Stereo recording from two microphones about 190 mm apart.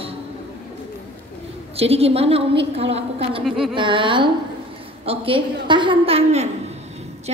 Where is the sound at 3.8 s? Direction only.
25° right (ahead or behind).